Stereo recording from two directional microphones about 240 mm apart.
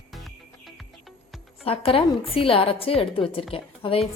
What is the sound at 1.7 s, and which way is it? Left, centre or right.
A woman's voice, left.